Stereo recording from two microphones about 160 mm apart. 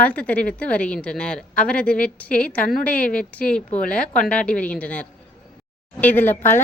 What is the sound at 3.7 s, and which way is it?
Speech, 60° left (ahead or behind).